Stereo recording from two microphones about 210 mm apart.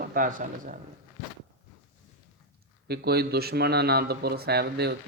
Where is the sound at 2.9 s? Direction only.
50° right (ahead or behind).